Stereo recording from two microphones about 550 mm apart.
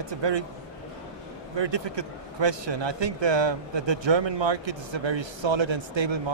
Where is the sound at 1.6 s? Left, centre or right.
Right.